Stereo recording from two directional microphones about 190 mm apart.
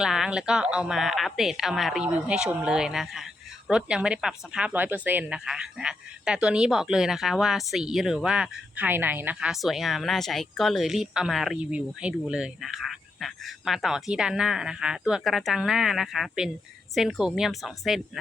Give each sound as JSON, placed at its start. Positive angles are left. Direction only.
{"t": 0.0, "sound": "speech", "side_deg": -5}